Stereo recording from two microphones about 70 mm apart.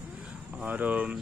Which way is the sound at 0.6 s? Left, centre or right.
Right.